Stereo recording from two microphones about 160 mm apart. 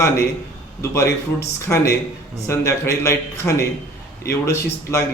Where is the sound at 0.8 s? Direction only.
20° left (ahead or behind).